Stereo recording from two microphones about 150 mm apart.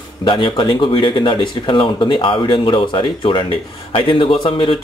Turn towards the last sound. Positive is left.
turn(degrees=35)  # may be behind; listen again after turning